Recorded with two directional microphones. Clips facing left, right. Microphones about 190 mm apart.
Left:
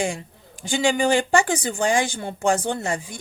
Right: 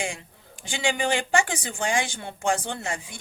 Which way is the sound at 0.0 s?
40° left (ahead or behind).